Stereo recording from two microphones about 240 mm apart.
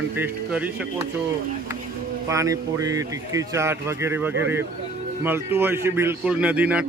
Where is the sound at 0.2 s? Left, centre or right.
Centre.